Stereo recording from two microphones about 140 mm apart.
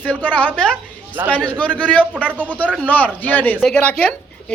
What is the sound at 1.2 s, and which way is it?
Speech, 15° right (ahead or behind).